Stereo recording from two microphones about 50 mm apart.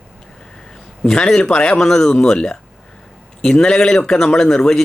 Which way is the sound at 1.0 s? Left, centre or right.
Centre.